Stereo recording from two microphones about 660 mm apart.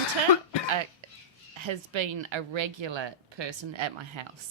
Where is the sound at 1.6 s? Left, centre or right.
Right.